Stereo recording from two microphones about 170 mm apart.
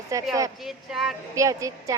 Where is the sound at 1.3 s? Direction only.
20° right (ahead or behind).